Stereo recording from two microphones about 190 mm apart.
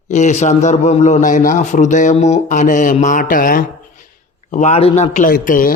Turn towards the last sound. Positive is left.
turn(degrees=45)  # may be behind; listen again after turning